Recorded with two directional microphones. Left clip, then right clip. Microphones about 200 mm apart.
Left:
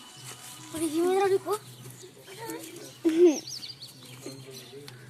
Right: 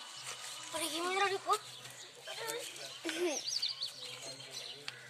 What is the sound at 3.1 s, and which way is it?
Speech, 20° left (ahead or behind).